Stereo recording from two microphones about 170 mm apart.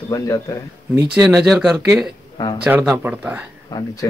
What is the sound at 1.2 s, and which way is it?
Speech, 5° right (ahead or behind).